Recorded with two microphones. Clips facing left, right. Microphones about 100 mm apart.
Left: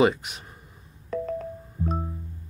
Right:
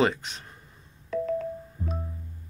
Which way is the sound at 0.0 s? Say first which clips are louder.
Left 3 dB; 10° left (ahead or behind).